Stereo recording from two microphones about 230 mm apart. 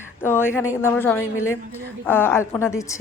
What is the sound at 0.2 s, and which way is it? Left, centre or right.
A woman's voice, centre.